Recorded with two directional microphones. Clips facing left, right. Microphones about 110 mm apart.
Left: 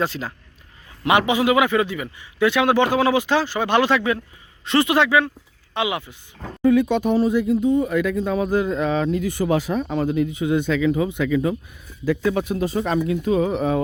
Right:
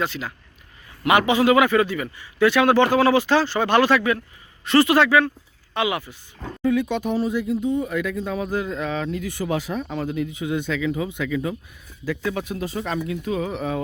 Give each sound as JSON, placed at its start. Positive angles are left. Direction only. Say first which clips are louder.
{"t": 0.0, "sound": "speech", "louder": "left 2 dB", "side_deg": 35}
{"t": 1.0, "sound": "a man's voice", "louder": "right 1 dB", "side_deg": 20}
{"t": 6.6, "sound": "speech", "louder": "left 5 dB", "side_deg": 45}
{"t": 12.0, "sound": "speech", "louder": "left 5 dB", "side_deg": 30}